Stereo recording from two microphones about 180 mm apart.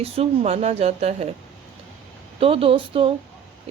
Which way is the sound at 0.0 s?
35° right (ahead or behind).